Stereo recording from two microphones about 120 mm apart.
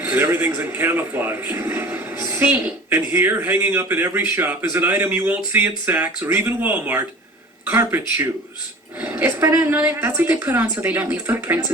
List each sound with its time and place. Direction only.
0.0 s a woman's voice: 20° right (ahead or behind)
1.9 s a woman's voice: 15° right (ahead or behind)